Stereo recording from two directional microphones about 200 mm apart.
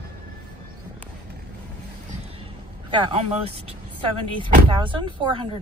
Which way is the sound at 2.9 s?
25° right (ahead or behind).